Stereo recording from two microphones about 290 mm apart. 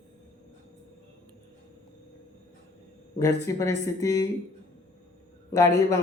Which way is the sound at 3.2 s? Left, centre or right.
Centre.